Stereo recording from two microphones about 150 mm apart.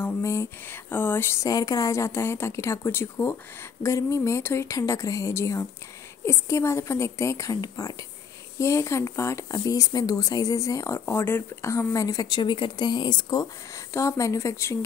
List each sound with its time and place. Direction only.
0.0 s speech: 15° left (ahead or behind)